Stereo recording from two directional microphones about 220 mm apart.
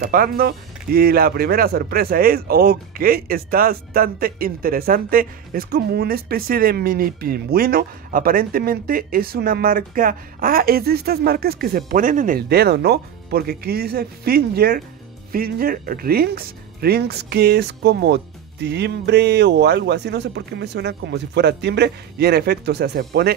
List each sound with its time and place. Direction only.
0.1 s speech: 40° right (ahead or behind)